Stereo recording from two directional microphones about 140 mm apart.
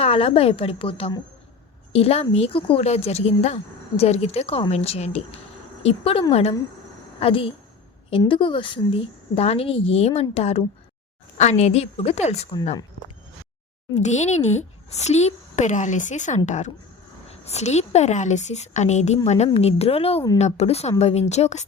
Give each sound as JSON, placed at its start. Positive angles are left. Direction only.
{"t": 0.0, "sound": "a woman's voice", "side_deg": 45}
{"t": 13.9, "sound": "speech", "side_deg": 55}
{"t": 17.2, "sound": "a woman's voice", "side_deg": 50}